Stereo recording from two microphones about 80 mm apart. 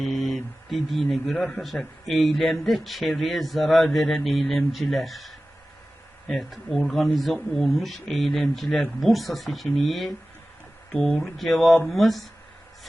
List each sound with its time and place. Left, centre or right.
0.0 s mantra: centre
1.1 s speech: centre
10.9 s speech: centre
11.2 s speech: centre